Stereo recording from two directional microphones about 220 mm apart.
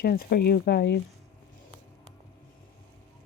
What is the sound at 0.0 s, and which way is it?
Speech, 45° left (ahead or behind).